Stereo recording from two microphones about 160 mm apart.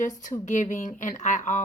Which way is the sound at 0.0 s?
50° left (ahead or behind).